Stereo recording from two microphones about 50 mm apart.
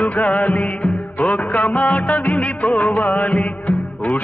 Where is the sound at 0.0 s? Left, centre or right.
Left.